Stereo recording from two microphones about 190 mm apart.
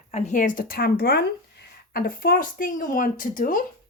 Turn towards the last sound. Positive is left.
turn(degrees=45)  # may be behind; listen again after turning